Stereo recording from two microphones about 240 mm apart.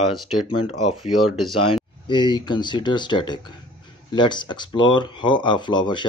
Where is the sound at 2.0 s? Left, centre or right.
Centre.